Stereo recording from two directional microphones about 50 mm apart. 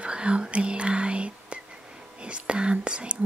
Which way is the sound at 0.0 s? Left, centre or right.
Right.